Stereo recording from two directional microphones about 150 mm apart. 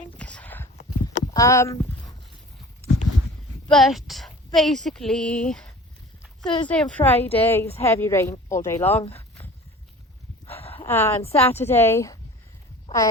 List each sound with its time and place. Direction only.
0.2 s a sound: 10° left (ahead or behind)
1.0 s livestock: 25° left (ahead or behind)
3.7 s speech: centre (ahead or behind)
6.4 s speech: 30° left (ahead or behind)
6.7 s a woman's voice: 10° left (ahead or behind)
10.4 s a sound: 40° left (ahead or behind)
10.8 s a woman's voice: 15° left (ahead or behind)
11.2 s a woman's voice: 40° left (ahead or behind)
11.4 s a woman's voice: 15° left (ahead or behind)